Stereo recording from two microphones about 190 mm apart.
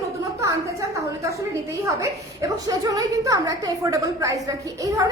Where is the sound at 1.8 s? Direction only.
15° right (ahead or behind).